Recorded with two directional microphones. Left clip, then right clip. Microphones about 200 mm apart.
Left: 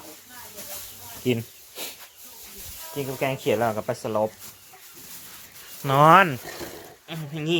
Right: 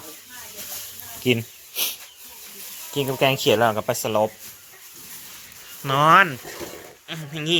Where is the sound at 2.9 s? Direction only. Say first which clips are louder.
Right 7 dB; 25° right (ahead or behind); by 4.3 s 10° right (ahead or behind).